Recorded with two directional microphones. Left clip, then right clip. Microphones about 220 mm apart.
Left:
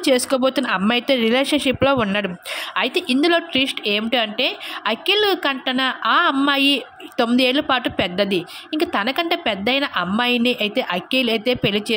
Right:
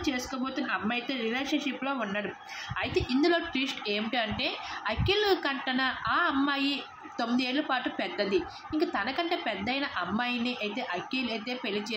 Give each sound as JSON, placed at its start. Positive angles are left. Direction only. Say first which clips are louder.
{"t": 0.0, "sound": "a woman's voice", "louder": "left 16 dB", "side_deg": 50}